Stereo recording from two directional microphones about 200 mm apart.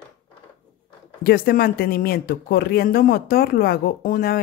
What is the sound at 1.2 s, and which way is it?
Speech, 50° left (ahead or behind).